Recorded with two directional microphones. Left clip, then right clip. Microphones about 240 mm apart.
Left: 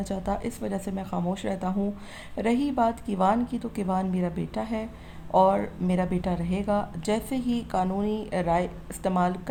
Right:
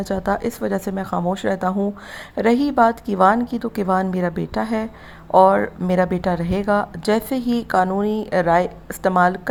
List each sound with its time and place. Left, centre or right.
0.0 s speech: right